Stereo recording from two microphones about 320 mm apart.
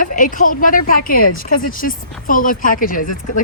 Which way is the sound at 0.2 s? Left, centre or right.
Left.